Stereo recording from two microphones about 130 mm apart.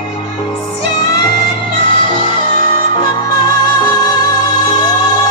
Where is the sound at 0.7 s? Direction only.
35° left (ahead or behind).